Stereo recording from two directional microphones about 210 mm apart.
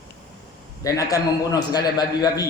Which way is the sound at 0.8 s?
15° left (ahead or behind).